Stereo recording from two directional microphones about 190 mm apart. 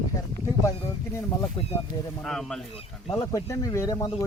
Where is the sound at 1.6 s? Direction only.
30° left (ahead or behind).